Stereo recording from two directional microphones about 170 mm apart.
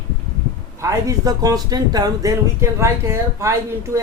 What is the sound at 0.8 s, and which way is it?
Speech, 20° right (ahead or behind).